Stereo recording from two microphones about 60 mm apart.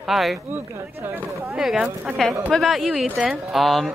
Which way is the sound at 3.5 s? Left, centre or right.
Centre.